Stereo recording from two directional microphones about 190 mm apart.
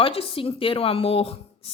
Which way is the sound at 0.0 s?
30° left (ahead or behind).